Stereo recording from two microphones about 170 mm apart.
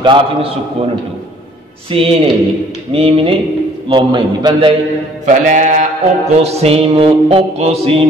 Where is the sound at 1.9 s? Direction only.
30° right (ahead or behind).